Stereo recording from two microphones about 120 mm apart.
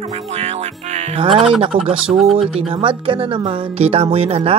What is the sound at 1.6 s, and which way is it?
Speech, 50° right (ahead or behind).